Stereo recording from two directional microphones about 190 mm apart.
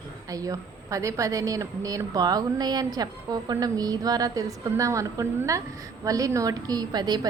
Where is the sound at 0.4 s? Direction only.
15° right (ahead or behind).